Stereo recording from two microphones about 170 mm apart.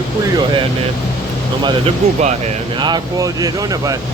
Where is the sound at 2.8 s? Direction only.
25° right (ahead or behind).